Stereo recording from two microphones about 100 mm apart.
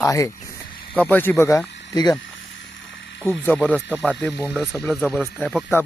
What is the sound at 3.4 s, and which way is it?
Speech, 20° left (ahead or behind).